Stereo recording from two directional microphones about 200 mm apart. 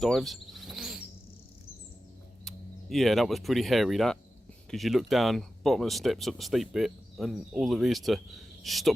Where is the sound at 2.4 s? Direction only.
Centre (ahead or behind).